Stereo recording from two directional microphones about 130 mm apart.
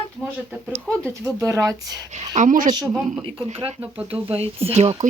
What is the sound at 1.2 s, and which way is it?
Speech, 25° right (ahead or behind).